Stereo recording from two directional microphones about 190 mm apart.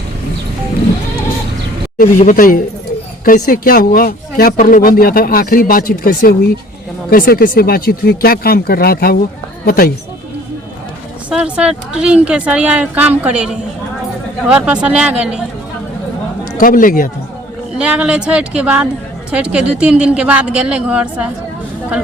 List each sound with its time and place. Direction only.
2.0 s speech: 45° left (ahead or behind)
11.3 s speech: 5° right (ahead or behind)
16.6 s speech: 45° left (ahead or behind)
17.7 s speech: 5° right (ahead or behind)